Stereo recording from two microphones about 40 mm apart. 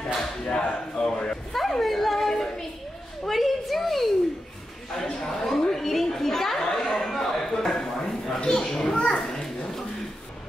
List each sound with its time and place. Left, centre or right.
0.5 s speech: left
1.5 s a woman's voice: centre
4.9 s chatter: centre
7.1 s a sound: centre
8.4 s a child's voice: centre
8.9 s children playing: left